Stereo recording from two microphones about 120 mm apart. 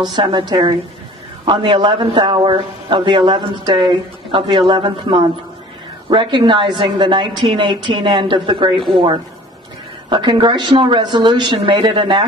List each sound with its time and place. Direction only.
0.1 s a man's voice: 40° right (ahead or behind)
10.0 s a man's voice: 40° right (ahead or behind)